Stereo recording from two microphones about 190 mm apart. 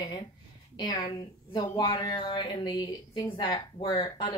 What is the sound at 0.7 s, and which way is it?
A woman's voice, 20° left (ahead or behind).